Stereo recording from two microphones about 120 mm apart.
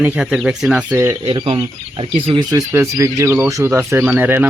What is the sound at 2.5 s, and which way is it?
Speech, 25° right (ahead or behind).